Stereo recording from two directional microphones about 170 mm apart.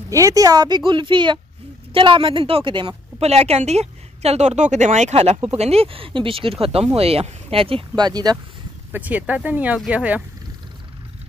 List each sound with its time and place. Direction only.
0.1 s a woman's voice: 20° right (ahead or behind)
3.2 s a woman's voice: 40° right (ahead or behind); by 8.4 s 25° right (ahead or behind)
8.9 s speech: 10° right (ahead or behind)